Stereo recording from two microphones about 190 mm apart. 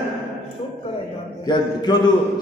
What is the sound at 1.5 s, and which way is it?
Speech, 20° left (ahead or behind).